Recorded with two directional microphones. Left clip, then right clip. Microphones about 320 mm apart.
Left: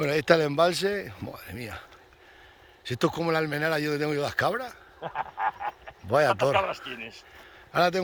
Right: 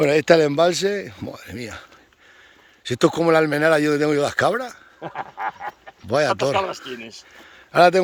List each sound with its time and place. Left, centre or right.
0.0 s speech: centre
2.8 s a man's voice: centre
4.9 s a sound: right
6.1 s speech: centre
7.0 s speech: right
7.7 s a man's voice: centre